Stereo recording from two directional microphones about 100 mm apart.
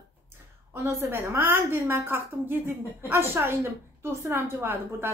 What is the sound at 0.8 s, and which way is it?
A woman's voice, 25° right (ahead or behind).